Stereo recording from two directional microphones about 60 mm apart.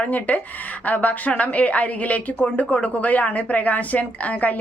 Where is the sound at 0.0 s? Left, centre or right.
Left.